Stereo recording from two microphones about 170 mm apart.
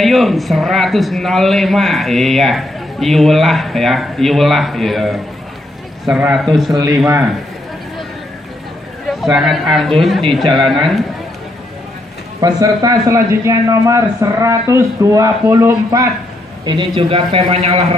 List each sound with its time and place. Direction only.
0.0 s a man's voice: centre (ahead or behind)
9.2 s a man's voice: centre (ahead or behind)
12.4 s a man's voice: 20° right (ahead or behind)
16.6 s a man's voice: 30° right (ahead or behind)